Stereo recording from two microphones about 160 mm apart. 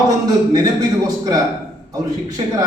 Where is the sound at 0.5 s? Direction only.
25° right (ahead or behind).